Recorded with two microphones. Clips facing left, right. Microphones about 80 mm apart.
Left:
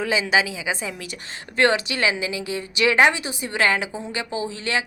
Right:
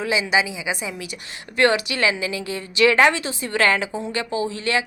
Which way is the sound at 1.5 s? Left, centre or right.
Left.